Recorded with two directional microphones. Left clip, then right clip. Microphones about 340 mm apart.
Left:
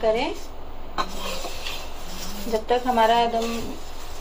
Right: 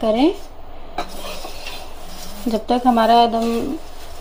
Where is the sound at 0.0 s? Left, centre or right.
Right.